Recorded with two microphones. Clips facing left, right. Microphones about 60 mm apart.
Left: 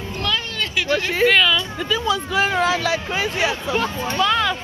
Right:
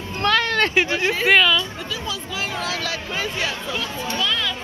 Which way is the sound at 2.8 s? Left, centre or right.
Centre.